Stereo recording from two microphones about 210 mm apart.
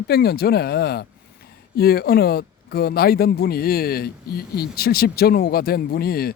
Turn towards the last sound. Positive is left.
turn(degrees=45)  # may be behind; listen again after turning